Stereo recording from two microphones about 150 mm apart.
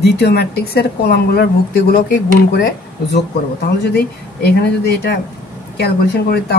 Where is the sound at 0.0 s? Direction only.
90° left.